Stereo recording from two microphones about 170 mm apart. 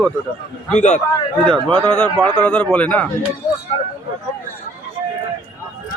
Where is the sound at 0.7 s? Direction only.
45° left (ahead or behind).